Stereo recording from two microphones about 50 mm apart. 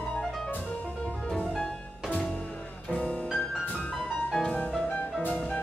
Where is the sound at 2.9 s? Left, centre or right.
Left.